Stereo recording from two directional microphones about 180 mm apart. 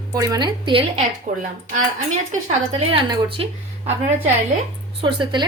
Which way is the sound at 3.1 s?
30° right (ahead or behind).